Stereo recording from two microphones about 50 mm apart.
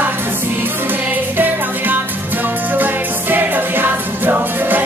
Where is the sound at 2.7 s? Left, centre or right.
Right.